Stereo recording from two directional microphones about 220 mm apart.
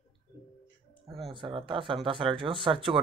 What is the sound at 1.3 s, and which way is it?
Speech, 20° right (ahead or behind).